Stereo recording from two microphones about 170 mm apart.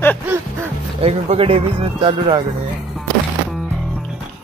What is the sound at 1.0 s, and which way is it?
Speech, 35° right (ahead or behind).